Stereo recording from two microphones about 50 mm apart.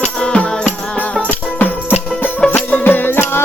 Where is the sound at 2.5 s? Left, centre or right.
Left.